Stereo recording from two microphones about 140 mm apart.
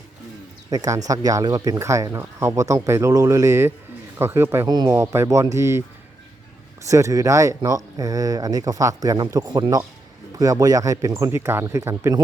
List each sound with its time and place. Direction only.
0.7 s speech: 25° right (ahead or behind)
6.8 s speech: 20° right (ahead or behind)